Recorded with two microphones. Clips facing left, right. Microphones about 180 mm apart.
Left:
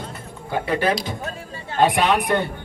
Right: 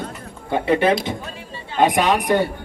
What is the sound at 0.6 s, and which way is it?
Speech, 25° right (ahead or behind).